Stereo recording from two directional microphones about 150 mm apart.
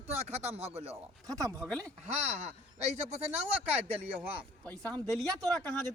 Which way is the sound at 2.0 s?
45° right (ahead or behind).